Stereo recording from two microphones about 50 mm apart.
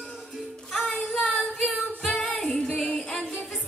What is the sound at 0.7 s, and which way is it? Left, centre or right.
Music, centre.